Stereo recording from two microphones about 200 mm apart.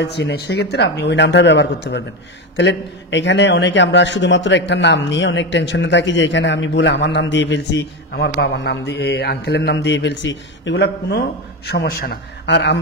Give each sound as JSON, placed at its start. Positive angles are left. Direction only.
{"t": 0.0, "sound": "a man's voice", "side_deg": 55}